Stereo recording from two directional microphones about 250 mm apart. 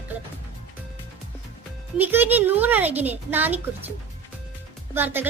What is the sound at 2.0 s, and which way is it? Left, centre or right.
Speech, centre.